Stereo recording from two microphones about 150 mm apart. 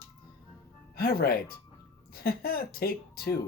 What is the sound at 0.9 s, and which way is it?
Speech, 90° left.